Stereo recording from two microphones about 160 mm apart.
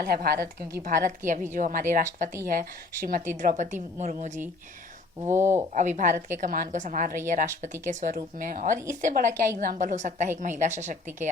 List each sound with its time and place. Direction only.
0.0 s a woman's voice: 70° right (ahead or behind)
0.8 s speech: 55° right (ahead or behind)
5.4 s speech: 15° right (ahead or behind)
5.7 s speech: 50° right (ahead or behind)